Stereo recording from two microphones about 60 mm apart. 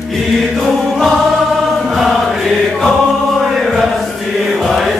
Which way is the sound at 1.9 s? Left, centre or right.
Centre.